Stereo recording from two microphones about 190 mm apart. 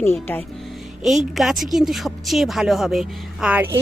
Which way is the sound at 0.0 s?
10° left (ahead or behind).